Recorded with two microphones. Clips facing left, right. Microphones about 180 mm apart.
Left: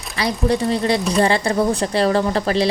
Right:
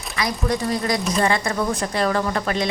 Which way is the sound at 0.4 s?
30° left (ahead or behind).